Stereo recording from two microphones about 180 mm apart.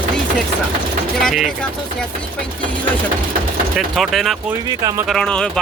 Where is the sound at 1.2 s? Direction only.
Centre (ahead or behind).